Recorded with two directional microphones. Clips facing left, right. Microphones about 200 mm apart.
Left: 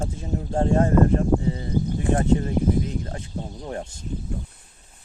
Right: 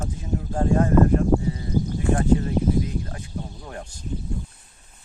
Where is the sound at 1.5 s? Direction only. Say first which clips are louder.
Even; 25° left (ahead or behind).